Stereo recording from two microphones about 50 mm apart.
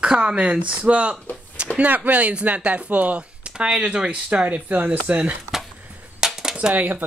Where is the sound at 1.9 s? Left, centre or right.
Right.